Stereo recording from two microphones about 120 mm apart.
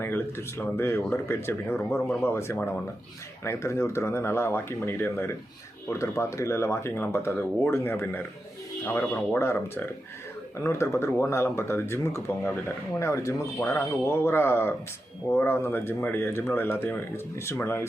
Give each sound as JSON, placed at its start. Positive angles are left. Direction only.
{"t": 0.0, "sound": "speech", "side_deg": 20}
{"t": 2.0, "sound": "speech", "side_deg": 0}
{"t": 2.2, "sound": "speech", "side_deg": 20}